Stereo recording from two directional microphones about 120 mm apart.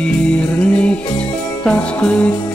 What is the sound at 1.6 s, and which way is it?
Music, 10° left (ahead or behind).